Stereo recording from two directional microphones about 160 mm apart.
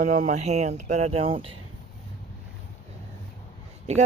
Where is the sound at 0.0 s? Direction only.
50° right (ahead or behind).